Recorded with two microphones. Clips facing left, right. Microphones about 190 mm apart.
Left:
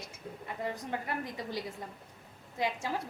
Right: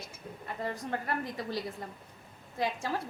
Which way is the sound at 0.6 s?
15° left (ahead or behind).